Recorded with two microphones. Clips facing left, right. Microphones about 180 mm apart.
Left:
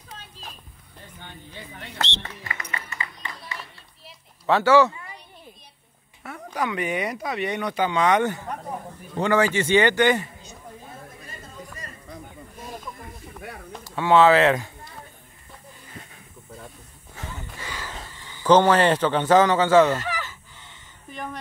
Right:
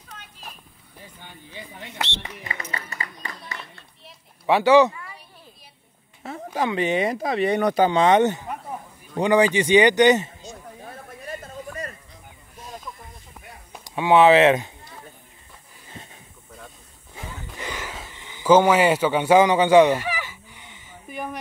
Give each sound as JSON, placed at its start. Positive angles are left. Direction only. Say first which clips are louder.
{"t": 1.2, "sound": "speech", "louder": "even", "side_deg": -10}
{"t": 2.5, "sound": "speech", "louder": "right 1 dB", "side_deg": -35}
{"t": 4.5, "sound": "speech", "louder": "right 2 dB", "side_deg": -15}
{"t": 6.2, "sound": "speech", "louder": "right 3 dB", "side_deg": -25}
{"t": 13.8, "sound": "speech", "louder": "right 1 dB", "side_deg": -15}
{"t": 17.1, "sound": "wild animals", "louder": "even", "side_deg": -15}
{"t": 17.9, "sound": "a sound", "louder": "right 1 dB", "side_deg": -15}